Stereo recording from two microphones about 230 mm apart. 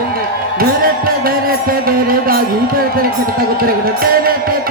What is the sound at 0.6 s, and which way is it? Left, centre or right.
Music, right.